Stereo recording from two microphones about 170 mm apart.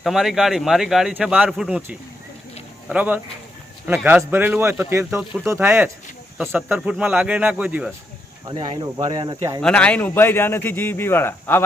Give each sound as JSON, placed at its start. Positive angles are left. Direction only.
{"t": 0.0, "sound": "speech", "side_deg": 0}
{"t": 8.4, "sound": "speech", "side_deg": -25}
{"t": 9.6, "sound": "a man's voice", "side_deg": 5}